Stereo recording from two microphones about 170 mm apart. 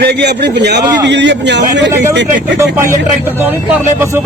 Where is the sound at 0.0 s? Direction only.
75° right (ahead or behind); by 1.9 s 90° right.